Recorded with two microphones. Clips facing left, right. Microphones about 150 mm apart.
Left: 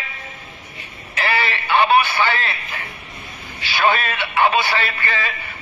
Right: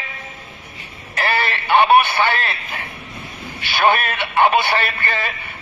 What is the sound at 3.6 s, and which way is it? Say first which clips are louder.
Radio: right 2 dB; 55° right (ahead or behind).